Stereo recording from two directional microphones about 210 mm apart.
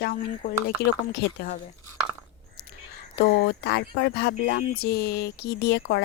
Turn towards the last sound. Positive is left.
turn(degrees=55)  # may be behind; listen again after turning